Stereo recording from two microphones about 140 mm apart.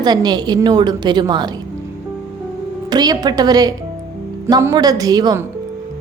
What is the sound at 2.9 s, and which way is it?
A woman's voice, 30° right (ahead or behind).